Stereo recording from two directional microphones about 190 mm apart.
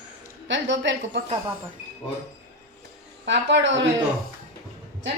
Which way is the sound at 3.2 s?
70° right (ahead or behind).